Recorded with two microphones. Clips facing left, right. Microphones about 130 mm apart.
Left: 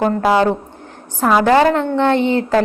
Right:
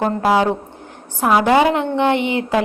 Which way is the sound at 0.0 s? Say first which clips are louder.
Left 2 dB; 10° right (ahead or behind).